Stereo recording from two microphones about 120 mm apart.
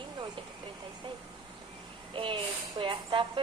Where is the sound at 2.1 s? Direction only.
45° right (ahead or behind).